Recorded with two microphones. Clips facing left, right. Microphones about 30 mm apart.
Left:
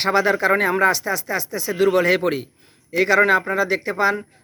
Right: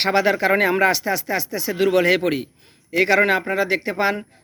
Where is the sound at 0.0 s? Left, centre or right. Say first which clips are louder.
Even; right.